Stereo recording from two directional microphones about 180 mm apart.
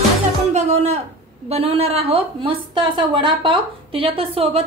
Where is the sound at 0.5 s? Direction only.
40° right (ahead or behind).